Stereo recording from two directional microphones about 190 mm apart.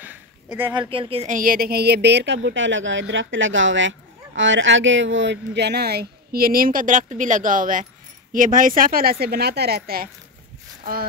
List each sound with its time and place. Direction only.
0.0 s a sound: 10° right (ahead or behind)
0.7 s speech: 30° right (ahead or behind)
1.3 s a woman's voice: 50° right (ahead or behind)